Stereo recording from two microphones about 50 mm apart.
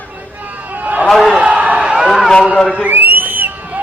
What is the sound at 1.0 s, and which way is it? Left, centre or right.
Speech, centre.